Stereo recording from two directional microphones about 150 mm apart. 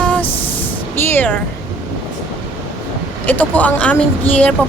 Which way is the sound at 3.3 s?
10° left (ahead or behind).